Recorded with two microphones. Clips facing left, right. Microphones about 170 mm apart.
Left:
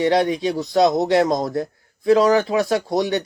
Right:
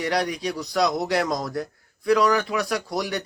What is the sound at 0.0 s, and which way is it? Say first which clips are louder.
Speech: left 7 dB; 25° left (ahead or behind).